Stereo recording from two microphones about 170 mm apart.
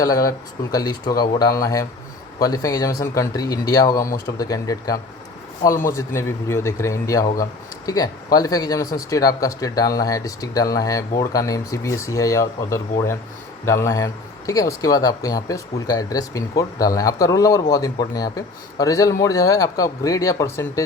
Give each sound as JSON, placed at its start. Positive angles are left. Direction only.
{"t": 0.0, "sound": "speech", "side_deg": 20}